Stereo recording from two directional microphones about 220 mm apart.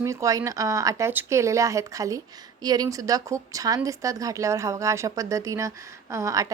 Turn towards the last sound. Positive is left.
turn(degrees=-15)  # may be behind; listen again after turning